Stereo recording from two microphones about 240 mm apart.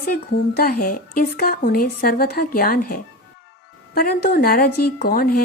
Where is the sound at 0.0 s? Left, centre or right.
Left.